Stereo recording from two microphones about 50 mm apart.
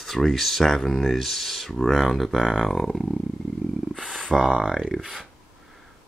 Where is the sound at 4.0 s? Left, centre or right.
Centre.